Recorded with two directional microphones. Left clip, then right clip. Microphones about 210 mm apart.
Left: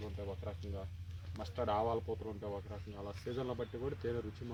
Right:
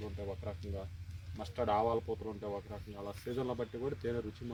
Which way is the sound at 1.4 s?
15° right (ahead or behind).